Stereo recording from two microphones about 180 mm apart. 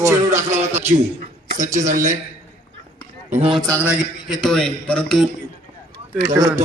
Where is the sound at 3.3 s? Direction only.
35° right (ahead or behind).